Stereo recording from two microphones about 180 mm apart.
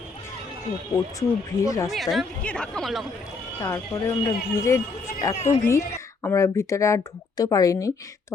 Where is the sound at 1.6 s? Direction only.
20° left (ahead or behind).